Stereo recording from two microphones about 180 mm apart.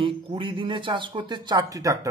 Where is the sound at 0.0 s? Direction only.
30° right (ahead or behind).